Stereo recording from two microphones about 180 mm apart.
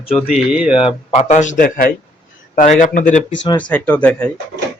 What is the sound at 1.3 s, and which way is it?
A man's voice, 45° left (ahead or behind).